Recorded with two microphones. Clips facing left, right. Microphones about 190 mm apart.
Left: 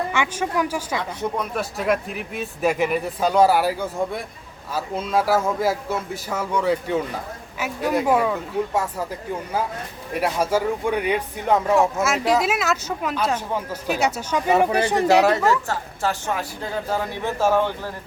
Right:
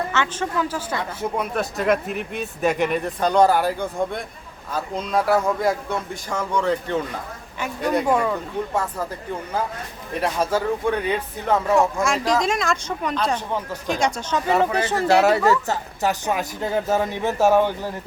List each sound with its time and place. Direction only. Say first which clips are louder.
0.1 s speech: left 1 dB; 10° left (ahead or behind)
1.2 s speech: right 3 dB; centre (ahead or behind)
10.2 s speech: left 1 dB; 10° left (ahead or behind)
11.8 s speech: even; 5° left (ahead or behind)
15.6 s speech: right 2 dB; 20° right (ahead or behind)